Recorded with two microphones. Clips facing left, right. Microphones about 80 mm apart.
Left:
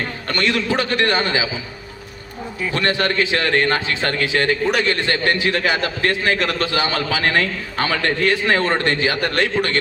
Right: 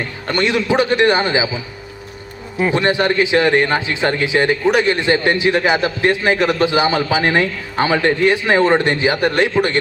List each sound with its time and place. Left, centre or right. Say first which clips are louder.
0.3 s a man's voice: right 4 dB; centre
2.7 s a man's voice: right 3 dB; centre